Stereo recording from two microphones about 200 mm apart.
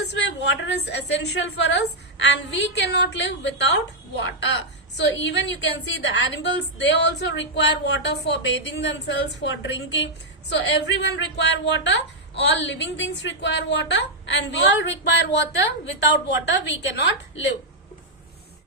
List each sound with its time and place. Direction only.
0.0 s a woman's voice: 60° left (ahead or behind)